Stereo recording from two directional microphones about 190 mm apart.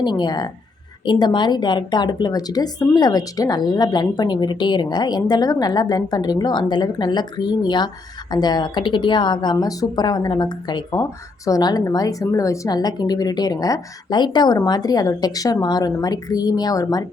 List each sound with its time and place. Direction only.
0.0 s a woman's voice: 20° left (ahead or behind)